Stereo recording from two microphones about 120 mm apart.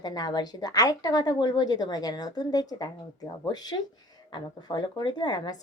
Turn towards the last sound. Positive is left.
turn(degrees=35)  # may be behind; listen again after turning